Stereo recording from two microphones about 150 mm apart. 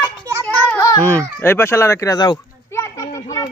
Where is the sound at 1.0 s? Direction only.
10° left (ahead or behind).